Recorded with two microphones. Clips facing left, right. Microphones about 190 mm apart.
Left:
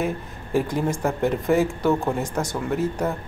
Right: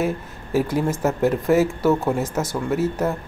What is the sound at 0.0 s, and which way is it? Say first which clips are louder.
A woman's voice: right 2 dB; 5° right (ahead or behind).